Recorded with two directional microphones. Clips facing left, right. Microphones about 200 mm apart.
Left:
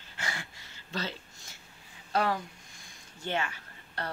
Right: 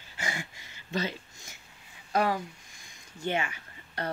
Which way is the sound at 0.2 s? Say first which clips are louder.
Right 3 dB; 15° right (ahead or behind).